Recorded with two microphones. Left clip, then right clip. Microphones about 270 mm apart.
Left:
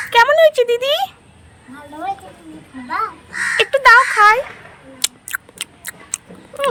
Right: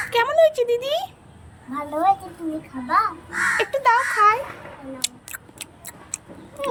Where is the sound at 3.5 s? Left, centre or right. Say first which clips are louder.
Left 11 dB; centre.